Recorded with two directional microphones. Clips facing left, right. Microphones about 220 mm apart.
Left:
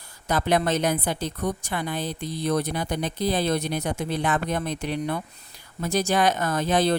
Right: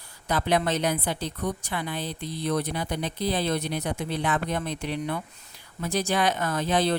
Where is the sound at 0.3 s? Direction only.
45° left (ahead or behind).